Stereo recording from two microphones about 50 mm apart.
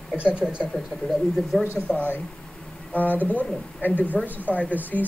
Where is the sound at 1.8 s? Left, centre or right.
Left.